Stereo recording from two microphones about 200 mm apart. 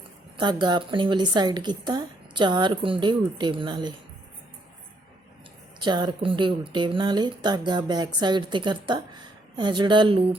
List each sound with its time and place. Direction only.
0.3 s a woman's voice: 20° right (ahead or behind)
5.8 s a woman's voice: 20° right (ahead or behind)